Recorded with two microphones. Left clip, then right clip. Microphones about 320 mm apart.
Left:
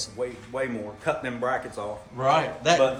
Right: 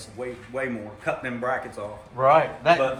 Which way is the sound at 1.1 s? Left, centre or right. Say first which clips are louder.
Even; left.